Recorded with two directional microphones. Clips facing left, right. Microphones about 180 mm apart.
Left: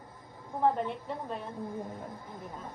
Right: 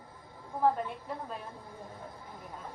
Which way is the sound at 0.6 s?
Centre (ahead or behind).